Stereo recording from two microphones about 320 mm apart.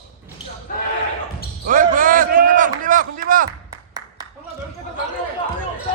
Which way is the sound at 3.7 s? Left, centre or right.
Centre.